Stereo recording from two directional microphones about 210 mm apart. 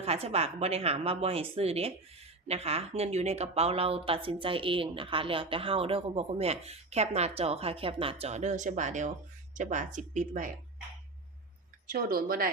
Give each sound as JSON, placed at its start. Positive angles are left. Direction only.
{"t": 0.0, "sound": "a woman's voice", "side_deg": -30}
{"t": 11.9, "sound": "speech", "side_deg": -45}